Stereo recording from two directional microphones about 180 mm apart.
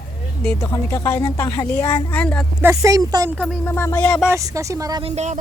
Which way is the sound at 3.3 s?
Centre (ahead or behind).